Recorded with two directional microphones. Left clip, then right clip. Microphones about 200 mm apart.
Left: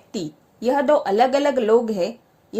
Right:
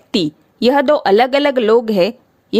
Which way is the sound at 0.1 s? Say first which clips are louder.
Right 12 dB; 65° right (ahead or behind).